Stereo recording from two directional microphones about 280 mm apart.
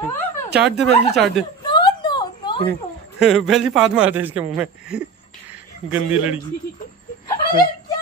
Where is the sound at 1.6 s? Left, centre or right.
Centre.